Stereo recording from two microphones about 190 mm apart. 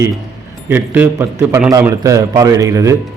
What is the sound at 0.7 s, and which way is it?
A man's voice, 10° right (ahead or behind).